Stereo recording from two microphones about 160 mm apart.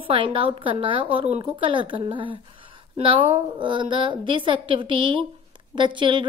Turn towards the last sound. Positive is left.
turn(degrees=-30)  # may be behind; listen again after turning